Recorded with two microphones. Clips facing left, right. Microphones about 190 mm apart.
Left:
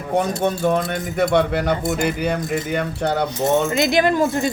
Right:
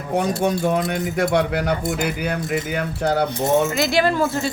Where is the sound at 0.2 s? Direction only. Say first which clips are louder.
Even; 10° right (ahead or behind).